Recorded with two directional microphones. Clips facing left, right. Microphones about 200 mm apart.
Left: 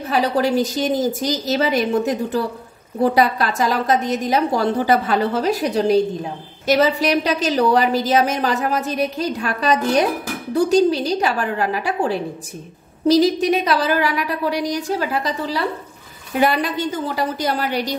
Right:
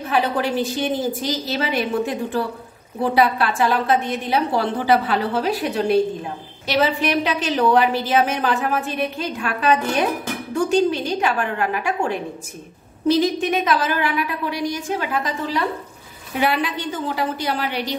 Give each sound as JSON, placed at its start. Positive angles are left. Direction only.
{"t": 0.1, "sound": "a woman's voice", "side_deg": 40}